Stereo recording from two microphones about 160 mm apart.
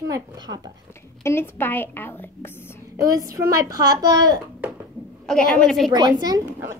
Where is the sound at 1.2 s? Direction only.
15° left (ahead or behind).